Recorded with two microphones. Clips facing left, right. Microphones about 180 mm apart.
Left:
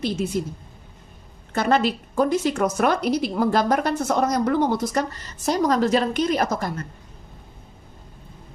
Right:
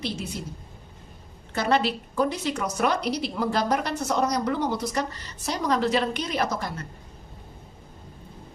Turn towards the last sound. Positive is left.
turn(degrees=45)  # may be behind; listen again after turning